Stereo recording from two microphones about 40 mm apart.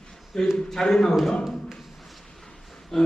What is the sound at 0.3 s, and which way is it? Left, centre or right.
Speech, centre.